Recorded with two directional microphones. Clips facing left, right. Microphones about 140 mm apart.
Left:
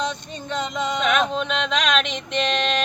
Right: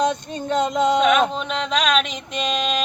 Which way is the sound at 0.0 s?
50° right (ahead or behind).